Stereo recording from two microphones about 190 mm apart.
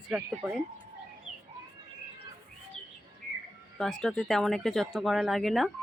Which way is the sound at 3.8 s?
Centre (ahead or behind).